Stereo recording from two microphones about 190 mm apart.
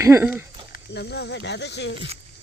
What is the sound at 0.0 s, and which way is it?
Speech, 10° right (ahead or behind).